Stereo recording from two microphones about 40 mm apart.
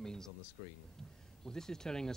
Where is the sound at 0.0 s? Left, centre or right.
Centre.